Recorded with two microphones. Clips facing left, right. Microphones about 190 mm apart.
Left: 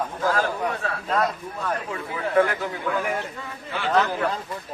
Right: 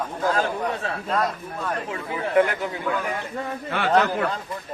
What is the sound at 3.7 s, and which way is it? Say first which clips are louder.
Speech: right 2 dB; 60° right (ahead or behind).